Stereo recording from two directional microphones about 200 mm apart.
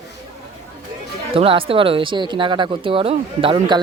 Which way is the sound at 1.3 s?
25° right (ahead or behind).